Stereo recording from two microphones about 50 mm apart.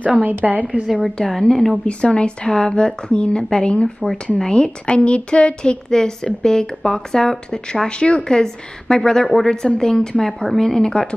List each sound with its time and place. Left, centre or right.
0.0 s a woman's voice: right
1.2 s a woman's voice: centre
1.9 s a woman's voice: left